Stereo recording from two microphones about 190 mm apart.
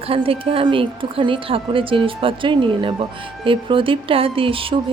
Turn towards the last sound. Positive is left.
turn(degrees=-30)  # may be behind; listen again after turning